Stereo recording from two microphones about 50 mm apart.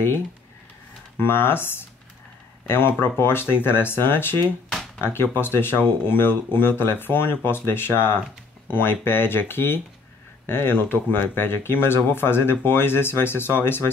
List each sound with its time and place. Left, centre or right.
1.2 s speech: left